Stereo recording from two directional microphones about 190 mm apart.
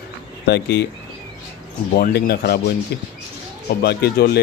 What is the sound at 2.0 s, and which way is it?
Speech, 55° left (ahead or behind).